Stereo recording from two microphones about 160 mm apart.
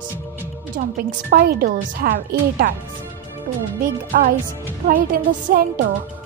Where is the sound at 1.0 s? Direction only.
60° right (ahead or behind).